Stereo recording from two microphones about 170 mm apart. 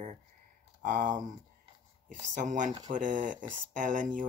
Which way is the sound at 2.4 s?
50° right (ahead or behind).